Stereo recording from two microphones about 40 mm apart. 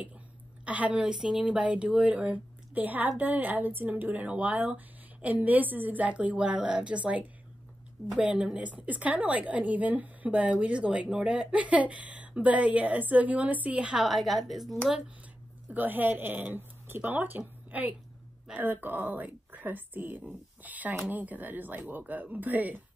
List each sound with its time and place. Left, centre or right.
0.7 s a woman's voice: right
1.1 s speech: centre
1.4 s speech: right
2.7 s a woman's voice: right
8.5 s a woman's voice: right
10.5 s a woman's voice: right
13.9 s a woman's voice: centre
15.7 s a woman's voice: right
18.6 s speech: right
20.6 s speech: right